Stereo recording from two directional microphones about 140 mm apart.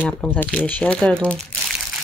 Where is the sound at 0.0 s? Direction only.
15° left (ahead or behind).